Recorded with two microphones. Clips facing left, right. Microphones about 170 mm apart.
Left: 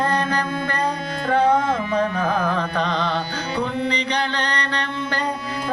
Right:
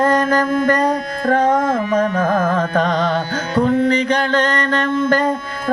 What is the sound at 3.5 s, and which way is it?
Music, 45° right (ahead or behind).